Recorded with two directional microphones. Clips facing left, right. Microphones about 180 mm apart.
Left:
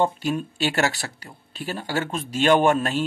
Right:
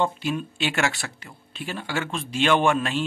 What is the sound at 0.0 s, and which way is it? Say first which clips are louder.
Speech: left 2 dB; 45° left (ahead or behind).